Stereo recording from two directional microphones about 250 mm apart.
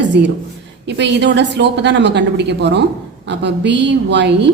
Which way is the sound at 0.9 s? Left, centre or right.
Right.